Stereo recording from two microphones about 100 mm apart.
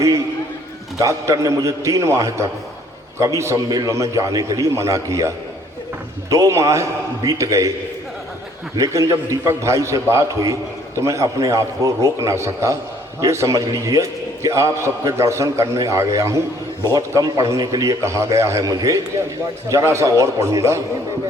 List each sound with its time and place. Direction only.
0.9 s a man's voice: 35° right (ahead or behind)
6.3 s a man's voice: 30° right (ahead or behind)
8.7 s a man's voice: 35° right (ahead or behind)